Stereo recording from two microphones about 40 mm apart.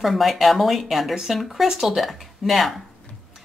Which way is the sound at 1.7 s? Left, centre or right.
Centre.